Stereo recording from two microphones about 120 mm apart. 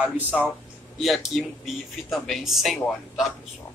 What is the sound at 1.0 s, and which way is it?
Speech, centre (ahead or behind).